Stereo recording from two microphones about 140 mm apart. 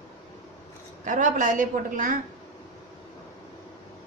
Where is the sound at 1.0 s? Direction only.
65° right (ahead or behind).